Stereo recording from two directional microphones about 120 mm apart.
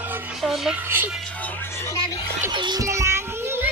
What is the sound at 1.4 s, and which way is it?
Music, 15° left (ahead or behind).